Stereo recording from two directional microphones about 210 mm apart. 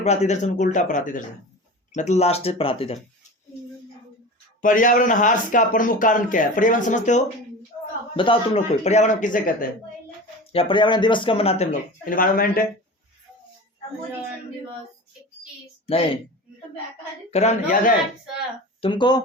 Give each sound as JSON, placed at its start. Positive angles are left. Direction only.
{"t": 0.0, "sound": "speech", "side_deg": 30}
{"t": 4.6, "sound": "speech", "side_deg": 40}
{"t": 8.1, "sound": "speech", "side_deg": 25}
{"t": 10.5, "sound": "speech", "side_deg": 25}
{"t": 15.9, "sound": "speech", "side_deg": 25}
{"t": 17.3, "sound": "speech", "side_deg": 35}
{"t": 18.8, "sound": "speech", "side_deg": 20}